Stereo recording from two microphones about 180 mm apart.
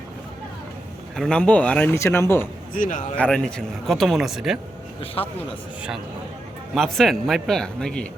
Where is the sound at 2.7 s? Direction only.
50° left (ahead or behind).